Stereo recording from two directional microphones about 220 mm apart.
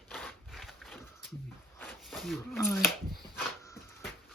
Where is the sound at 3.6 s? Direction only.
15° left (ahead or behind).